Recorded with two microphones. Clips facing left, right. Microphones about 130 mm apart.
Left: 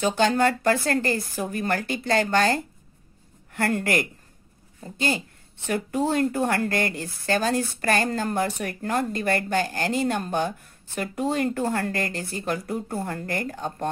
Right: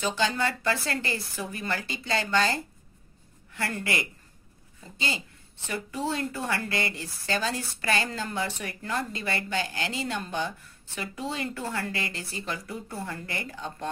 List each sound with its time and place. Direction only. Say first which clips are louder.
0.0 s speech: left 7 dB; 50° left (ahead or behind)